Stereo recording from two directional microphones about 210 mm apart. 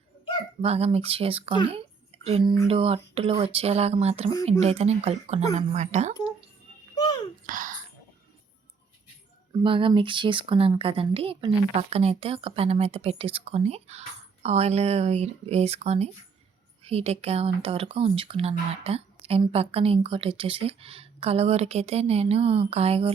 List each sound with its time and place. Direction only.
0.6 s a woman's voice: 30° right (ahead or behind)
6.9 s oink: 20° left (ahead or behind)
7.4 s a sound: 40° right (ahead or behind)
9.6 s a woman's voice: 25° right (ahead or behind)